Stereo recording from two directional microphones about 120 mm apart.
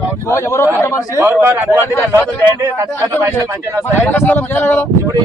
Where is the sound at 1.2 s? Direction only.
15° right (ahead or behind).